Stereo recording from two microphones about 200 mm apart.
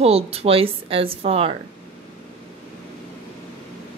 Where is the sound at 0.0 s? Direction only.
30° right (ahead or behind).